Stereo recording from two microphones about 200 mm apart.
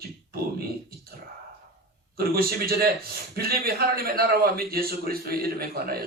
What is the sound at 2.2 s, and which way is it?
A man's voice, 50° right (ahead or behind).